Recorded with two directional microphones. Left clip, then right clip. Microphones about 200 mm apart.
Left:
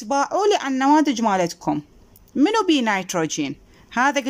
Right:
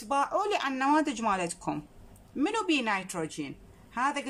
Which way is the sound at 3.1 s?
45° left (ahead or behind).